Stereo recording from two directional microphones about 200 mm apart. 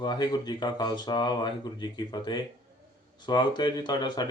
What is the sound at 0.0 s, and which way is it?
Speech, 20° left (ahead or behind).